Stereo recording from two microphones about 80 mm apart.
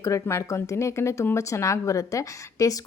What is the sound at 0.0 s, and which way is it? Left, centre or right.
A woman's voice, left.